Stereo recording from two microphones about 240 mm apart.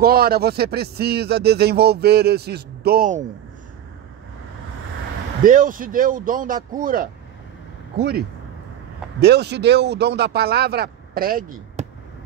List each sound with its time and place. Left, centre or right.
0.0 s speech: right
5.4 s speech: right
9.2 s speech: right